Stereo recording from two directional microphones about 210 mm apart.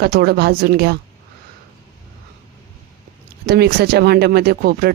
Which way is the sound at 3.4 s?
50° right (ahead or behind).